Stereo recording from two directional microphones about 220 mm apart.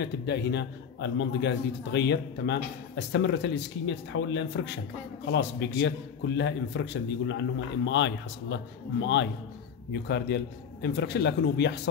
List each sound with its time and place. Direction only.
0.0 s a man's voice: 50° left (ahead or behind)